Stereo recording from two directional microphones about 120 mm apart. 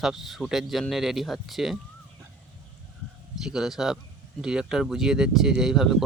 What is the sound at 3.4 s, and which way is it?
Speech, 5° right (ahead or behind).